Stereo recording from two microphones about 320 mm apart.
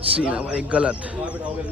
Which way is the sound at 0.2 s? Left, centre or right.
Centre.